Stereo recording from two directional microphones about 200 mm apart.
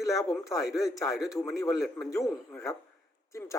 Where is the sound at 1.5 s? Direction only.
15° left (ahead or behind).